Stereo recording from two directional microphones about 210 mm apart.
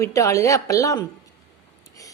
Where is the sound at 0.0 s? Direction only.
15° left (ahead or behind).